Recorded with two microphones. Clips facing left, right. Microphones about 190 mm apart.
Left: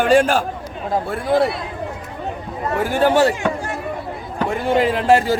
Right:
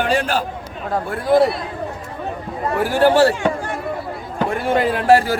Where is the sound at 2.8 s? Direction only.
20° left (ahead or behind).